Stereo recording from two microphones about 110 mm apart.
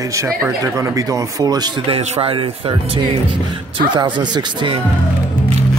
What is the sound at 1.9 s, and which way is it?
Speech, 60° right (ahead or behind).